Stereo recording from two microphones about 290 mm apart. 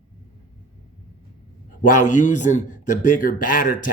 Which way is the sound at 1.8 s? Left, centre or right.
Left.